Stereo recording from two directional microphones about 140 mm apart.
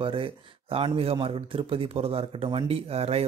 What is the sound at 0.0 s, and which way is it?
Speech, 40° right (ahead or behind).